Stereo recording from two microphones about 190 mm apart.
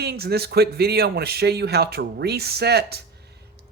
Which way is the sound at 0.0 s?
55° right (ahead or behind).